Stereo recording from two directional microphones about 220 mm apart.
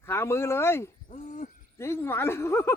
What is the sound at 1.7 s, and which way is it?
Speech, 10° left (ahead or behind).